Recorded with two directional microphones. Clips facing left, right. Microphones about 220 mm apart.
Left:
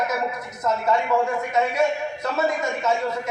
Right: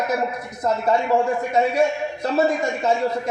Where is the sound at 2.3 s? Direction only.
30° right (ahead or behind).